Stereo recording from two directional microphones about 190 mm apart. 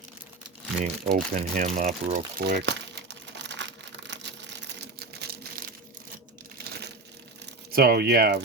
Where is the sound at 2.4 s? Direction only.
65° right (ahead or behind).